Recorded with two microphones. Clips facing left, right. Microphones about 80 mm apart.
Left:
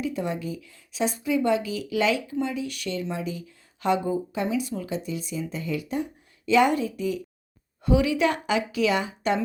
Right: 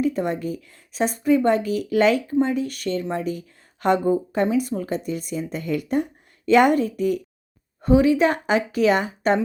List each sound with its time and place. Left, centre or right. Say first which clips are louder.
0.0 s a woman's voice: right 6 dB; right
7.8 s a woman's voice: right 5 dB; right